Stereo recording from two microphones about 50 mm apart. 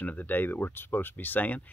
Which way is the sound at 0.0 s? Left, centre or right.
Left.